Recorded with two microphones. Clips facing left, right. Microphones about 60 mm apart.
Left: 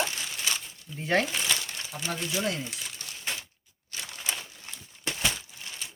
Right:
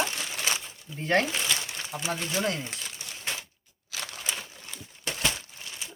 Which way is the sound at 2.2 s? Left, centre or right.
Right.